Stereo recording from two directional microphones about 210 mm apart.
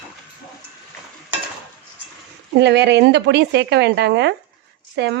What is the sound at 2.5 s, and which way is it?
Speech, 55° right (ahead or behind).